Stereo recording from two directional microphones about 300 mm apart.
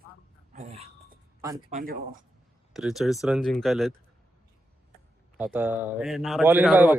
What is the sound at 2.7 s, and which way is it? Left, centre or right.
A man's voice, centre.